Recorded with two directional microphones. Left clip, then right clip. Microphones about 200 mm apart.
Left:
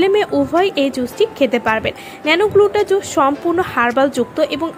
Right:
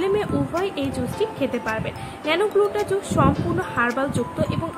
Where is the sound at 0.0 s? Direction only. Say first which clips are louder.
Left 8 dB; 35° left (ahead or behind).